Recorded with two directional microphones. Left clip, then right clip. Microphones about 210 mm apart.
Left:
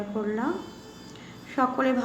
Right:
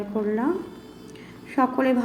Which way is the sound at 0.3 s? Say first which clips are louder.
Right 5 dB; 10° right (ahead or behind).